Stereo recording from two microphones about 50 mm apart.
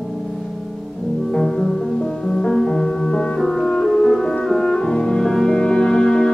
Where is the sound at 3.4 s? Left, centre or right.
Centre.